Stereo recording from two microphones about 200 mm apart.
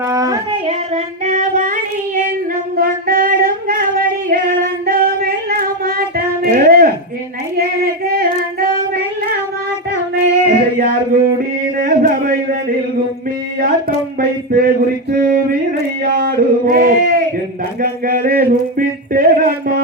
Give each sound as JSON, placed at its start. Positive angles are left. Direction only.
{"t": 0.1, "sound": "child singing", "side_deg": -15}
{"t": 0.7, "sound": "child singing", "side_deg": -35}
{"t": 2.7, "sound": "singing", "side_deg": -45}
{"t": 7.5, "sound": "child singing", "side_deg": -45}
{"t": 10.4, "sound": "a sound", "side_deg": -45}
{"t": 14.2, "sound": "a sound", "side_deg": -45}